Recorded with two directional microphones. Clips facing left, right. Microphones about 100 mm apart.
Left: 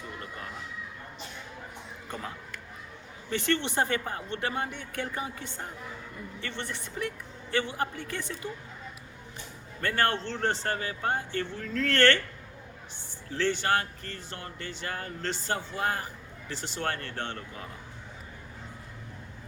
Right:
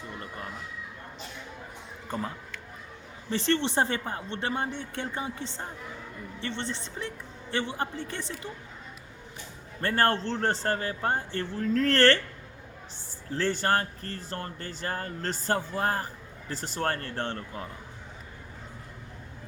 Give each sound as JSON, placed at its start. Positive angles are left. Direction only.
{"t": 3.2, "sound": "speech", "side_deg": -30}
{"t": 9.8, "sound": "speech", "side_deg": -35}
{"t": 13.3, "sound": "speech", "side_deg": -40}